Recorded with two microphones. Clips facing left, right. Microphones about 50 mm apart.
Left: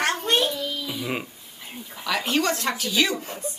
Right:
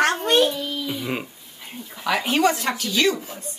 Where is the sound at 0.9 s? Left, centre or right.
Centre.